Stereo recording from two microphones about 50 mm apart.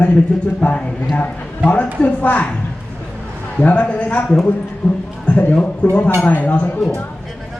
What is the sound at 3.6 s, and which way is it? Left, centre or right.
A man's voice, left.